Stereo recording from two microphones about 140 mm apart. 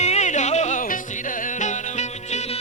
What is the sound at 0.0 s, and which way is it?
Music, 55° left (ahead or behind).